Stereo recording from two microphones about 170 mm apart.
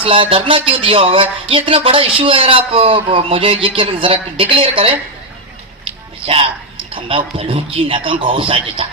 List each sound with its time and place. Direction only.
0.0 s speech: 30° right (ahead or behind)
6.2 s speech: 35° right (ahead or behind)